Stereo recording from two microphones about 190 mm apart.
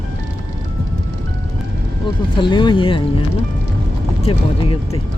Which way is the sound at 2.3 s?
25° left (ahead or behind).